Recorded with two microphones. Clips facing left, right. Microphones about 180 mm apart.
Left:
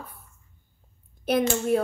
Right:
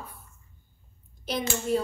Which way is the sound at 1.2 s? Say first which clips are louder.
Left 7 dB; 60° left (ahead or behind).